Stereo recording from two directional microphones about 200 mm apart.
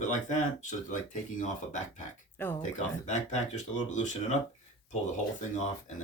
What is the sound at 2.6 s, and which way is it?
Speech, 35° left (ahead or behind).